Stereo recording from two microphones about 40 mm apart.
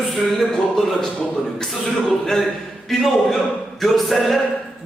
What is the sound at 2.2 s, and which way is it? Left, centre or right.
Speech, centre.